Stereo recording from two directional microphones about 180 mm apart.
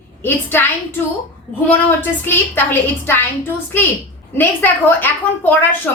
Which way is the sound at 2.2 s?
10° left (ahead or behind).